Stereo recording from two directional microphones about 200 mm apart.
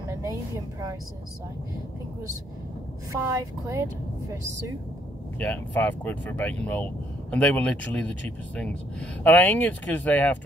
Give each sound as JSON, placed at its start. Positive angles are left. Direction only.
{"t": 0.1, "sound": "music", "side_deg": -15}
{"t": 3.1, "sound": "speech", "side_deg": -15}
{"t": 5.4, "sound": "speech", "side_deg": 10}